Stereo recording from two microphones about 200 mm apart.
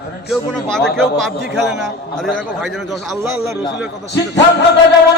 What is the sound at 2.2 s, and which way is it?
Speech, centre (ahead or behind).